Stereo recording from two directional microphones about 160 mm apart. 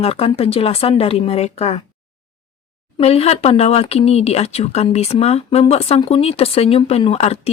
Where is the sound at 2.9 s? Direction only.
40° left (ahead or behind).